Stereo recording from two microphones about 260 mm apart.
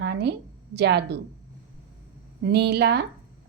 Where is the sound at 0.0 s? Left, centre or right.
Right.